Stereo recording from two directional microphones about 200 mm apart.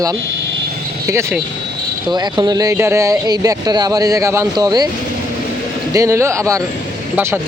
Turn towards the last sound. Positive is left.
turn(degrees=-10)  # may be behind; listen again after turning